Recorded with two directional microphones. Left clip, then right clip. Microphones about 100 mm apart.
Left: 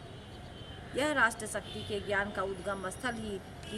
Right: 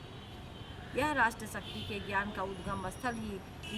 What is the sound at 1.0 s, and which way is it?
Speech, 15° right (ahead or behind).